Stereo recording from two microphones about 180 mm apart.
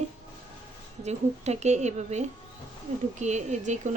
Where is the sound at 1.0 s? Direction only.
40° right (ahead or behind).